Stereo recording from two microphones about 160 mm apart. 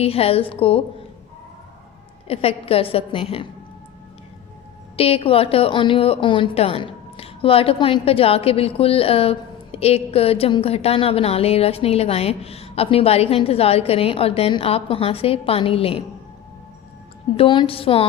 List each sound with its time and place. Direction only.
0.0 s a woman's voice: 40° left (ahead or behind)
2.2 s a woman's voice: 40° left (ahead or behind)
4.9 s a woman's voice: 35° left (ahead or behind)
17.3 s a woman's voice: 30° left (ahead or behind)